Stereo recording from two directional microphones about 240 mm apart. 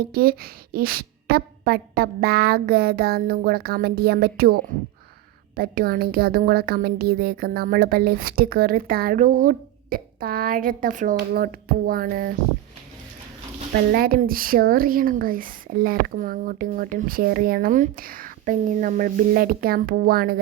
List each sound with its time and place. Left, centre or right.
0.0 s a woman's voice: right
13.9 s a woman's voice: right